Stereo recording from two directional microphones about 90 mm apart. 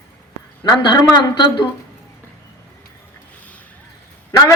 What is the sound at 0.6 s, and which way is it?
Speech, 50° left (ahead or behind).